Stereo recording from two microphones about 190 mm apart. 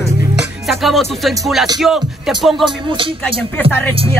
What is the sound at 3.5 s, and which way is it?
Speech, 10° left (ahead or behind).